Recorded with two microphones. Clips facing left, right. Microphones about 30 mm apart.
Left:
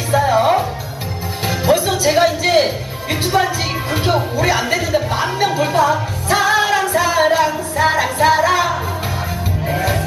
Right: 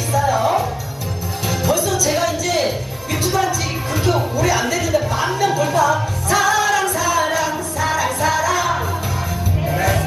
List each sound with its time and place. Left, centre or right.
0.1 s music: left
2.6 s a sound: left
3.9 s speech: left
4.7 s music: left